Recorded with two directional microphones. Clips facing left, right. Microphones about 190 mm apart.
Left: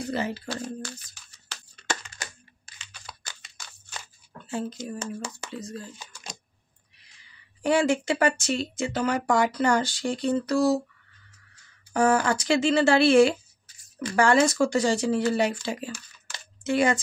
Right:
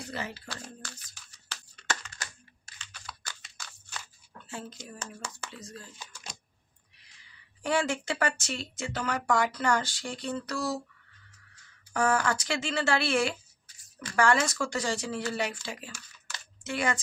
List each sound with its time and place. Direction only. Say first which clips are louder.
0.1 s speech: left 8 dB; 30° left (ahead or behind)
1.5 s computer keyboard: left 3 dB; 20° left (ahead or behind)
4.5 s speech: left 10 dB; 25° left (ahead or behind)
7.6 s speech: left 6 dB; 15° left (ahead or behind)
11.9 s speech: left 5 dB; 25° left (ahead or behind)